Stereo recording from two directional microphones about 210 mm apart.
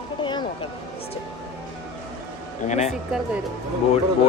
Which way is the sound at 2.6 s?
35° left (ahead or behind).